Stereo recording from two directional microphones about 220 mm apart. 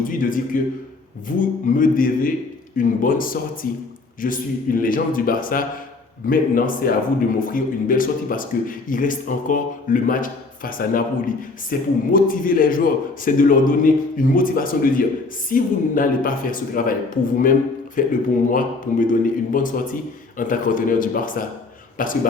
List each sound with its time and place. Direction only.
0.0 s a man's voice: 40° left (ahead or behind)